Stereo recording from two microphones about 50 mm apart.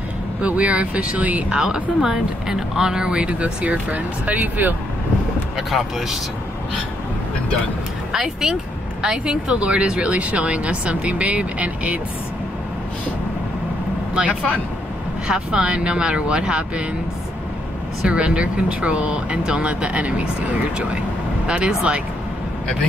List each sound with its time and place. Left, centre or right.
0.4 s speech: right
1.5 s speech: centre; by 4.7 s right
5.6 s speech: centre
8.1 s speech: centre
14.1 s speech: right
18.0 s speech: right